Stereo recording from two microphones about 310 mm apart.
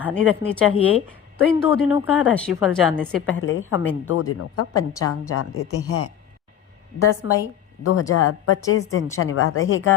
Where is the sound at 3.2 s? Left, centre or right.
Left.